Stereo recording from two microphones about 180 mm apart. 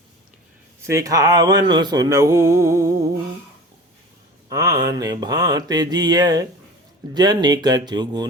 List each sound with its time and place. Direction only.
0.9 s mantra: 20° right (ahead or behind)
4.4 s mantra: 20° right (ahead or behind)